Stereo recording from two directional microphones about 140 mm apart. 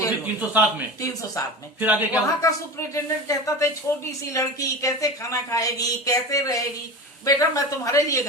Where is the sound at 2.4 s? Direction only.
25° left (ahead or behind).